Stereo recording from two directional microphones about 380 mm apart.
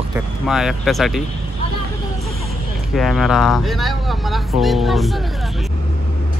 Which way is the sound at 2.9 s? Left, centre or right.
Centre.